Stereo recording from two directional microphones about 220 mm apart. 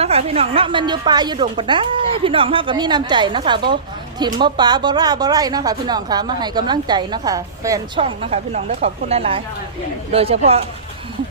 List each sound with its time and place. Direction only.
0.0 s a woman's voice: 30° right (ahead or behind)